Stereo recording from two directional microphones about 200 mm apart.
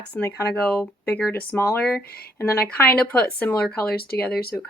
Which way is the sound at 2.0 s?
50° left (ahead or behind).